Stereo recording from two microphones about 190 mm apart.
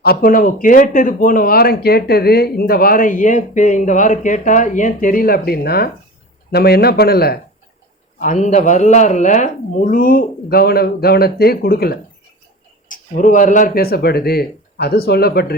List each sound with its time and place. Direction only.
0.0 s speech: 50° left (ahead or behind)
8.2 s speech: 40° left (ahead or behind)
12.9 s speech: 45° left (ahead or behind)